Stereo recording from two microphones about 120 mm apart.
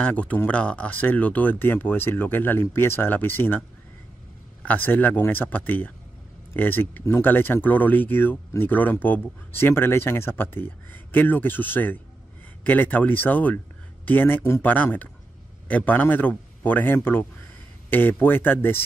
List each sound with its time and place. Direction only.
0.0 s speech: 10° left (ahead or behind)
4.6 s speech: 15° left (ahead or behind)